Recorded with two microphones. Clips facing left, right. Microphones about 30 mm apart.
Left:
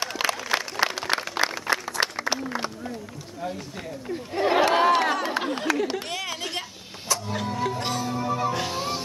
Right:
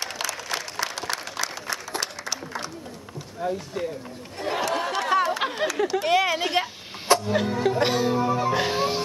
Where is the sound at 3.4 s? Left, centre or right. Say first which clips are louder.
Right 6 dB; centre.